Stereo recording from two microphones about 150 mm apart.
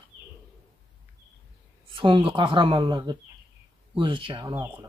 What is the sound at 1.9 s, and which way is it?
Speech, 35° right (ahead or behind).